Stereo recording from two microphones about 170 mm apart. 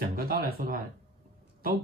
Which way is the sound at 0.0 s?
60° right (ahead or behind).